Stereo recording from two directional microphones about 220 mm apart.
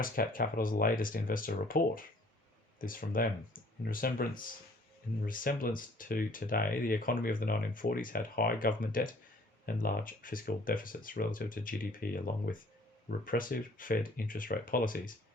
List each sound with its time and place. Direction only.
0.0 s speech: 40° left (ahead or behind)